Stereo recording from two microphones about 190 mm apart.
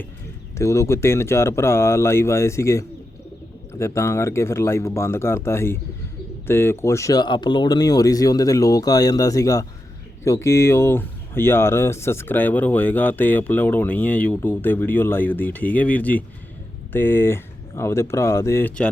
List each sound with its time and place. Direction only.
0.5 s speech: 15° left (ahead or behind)